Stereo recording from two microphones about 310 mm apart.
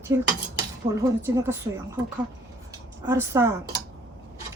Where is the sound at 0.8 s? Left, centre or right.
Centre.